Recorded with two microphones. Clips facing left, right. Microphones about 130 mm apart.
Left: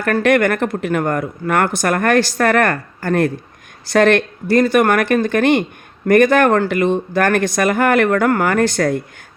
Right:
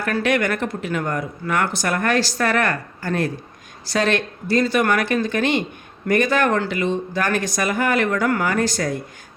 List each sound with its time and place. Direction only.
0.0 s a woman's voice: 55° left (ahead or behind)